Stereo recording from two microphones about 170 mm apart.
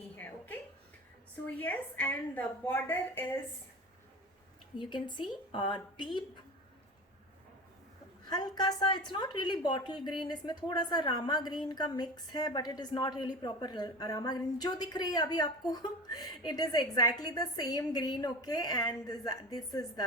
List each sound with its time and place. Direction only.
0.2 s a sound: 10° left (ahead or behind)
1.5 s a woman's voice: 10° left (ahead or behind)
4.8 s a woman's voice: 30° left (ahead or behind)
8.4 s a woman's voice: 25° left (ahead or behind)